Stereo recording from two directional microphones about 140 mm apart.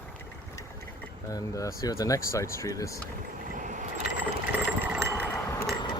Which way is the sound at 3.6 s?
65° right (ahead or behind).